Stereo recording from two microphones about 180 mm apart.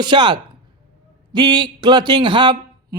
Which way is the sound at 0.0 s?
25° right (ahead or behind).